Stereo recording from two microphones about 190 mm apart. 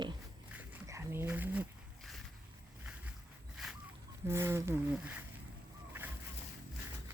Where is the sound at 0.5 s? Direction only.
10° right (ahead or behind).